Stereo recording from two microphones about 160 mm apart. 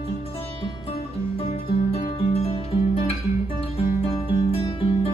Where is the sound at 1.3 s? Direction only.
35° left (ahead or behind).